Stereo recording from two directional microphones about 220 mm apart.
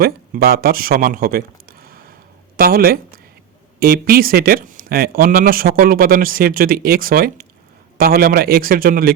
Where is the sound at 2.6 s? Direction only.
45° right (ahead or behind).